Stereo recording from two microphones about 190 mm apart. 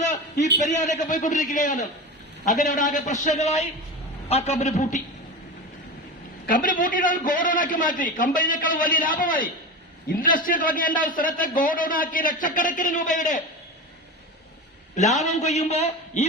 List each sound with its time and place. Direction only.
0.0 s a sound: 40° left (ahead or behind)
0.6 s a man's voice: 40° left (ahead or behind)
6.4 s a man's voice: 45° left (ahead or behind)
14.9 s a man's voice: 40° left (ahead or behind)